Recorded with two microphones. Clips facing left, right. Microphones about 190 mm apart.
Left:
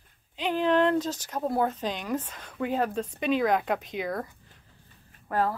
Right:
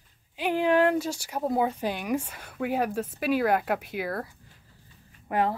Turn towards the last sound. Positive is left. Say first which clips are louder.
# right 1 dB
turn(degrees=-20)  # may be behind; listen again after turning